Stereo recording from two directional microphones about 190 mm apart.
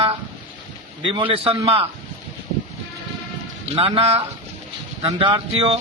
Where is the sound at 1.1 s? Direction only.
30° right (ahead or behind).